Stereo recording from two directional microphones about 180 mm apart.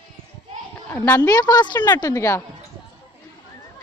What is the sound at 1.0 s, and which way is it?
A woman's voice, 20° left (ahead or behind).